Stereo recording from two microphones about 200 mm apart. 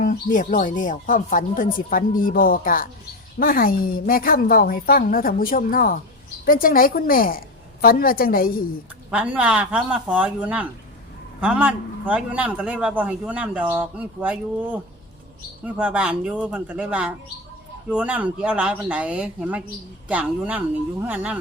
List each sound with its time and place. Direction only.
0.0 s speech: 40° left (ahead or behind)
9.0 s a man's voice: 5° right (ahead or behind)